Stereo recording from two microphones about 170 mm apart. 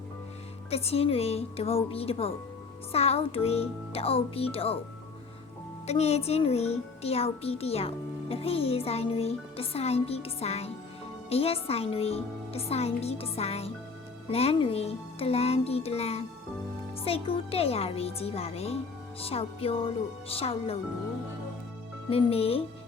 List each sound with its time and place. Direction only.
0.7 s speech: 35° left (ahead or behind)
5.8 s speech: 40° left (ahead or behind)
22.1 s speech: 35° left (ahead or behind)